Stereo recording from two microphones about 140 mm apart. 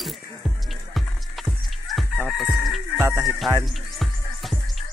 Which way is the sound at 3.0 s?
20° right (ahead or behind).